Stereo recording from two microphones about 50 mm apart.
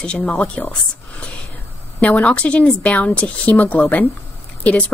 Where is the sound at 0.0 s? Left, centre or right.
Left.